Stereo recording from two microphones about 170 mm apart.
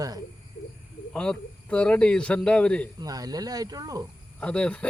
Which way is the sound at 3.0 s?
20° right (ahead or behind).